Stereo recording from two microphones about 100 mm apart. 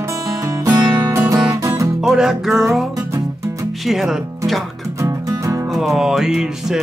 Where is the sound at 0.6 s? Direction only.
40° right (ahead or behind).